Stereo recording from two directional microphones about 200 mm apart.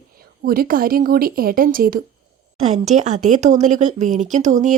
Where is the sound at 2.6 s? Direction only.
35° right (ahead or behind).